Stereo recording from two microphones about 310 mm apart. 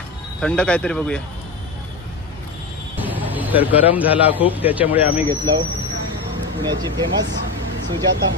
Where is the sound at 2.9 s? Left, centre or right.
Centre.